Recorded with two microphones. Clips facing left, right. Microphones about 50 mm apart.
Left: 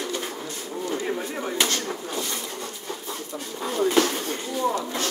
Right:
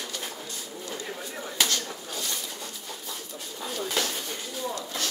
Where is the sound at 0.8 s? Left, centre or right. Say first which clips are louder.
Left 9 dB; left.